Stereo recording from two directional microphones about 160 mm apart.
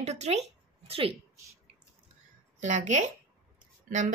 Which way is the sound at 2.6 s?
50° right (ahead or behind).